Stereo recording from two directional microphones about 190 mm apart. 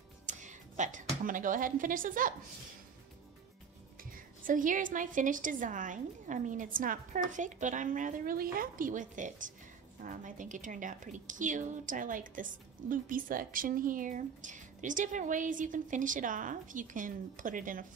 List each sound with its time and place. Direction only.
0.3 s a woman's voice: 40° right (ahead or behind)
4.1 s a woman's voice: 45° right (ahead or behind)